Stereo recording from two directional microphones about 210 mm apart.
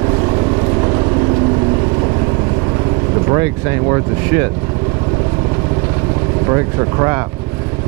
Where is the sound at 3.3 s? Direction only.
15° right (ahead or behind).